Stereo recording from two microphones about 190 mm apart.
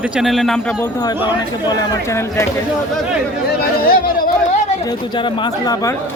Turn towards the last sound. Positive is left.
turn(degrees=20)  # may be behind; listen again after turning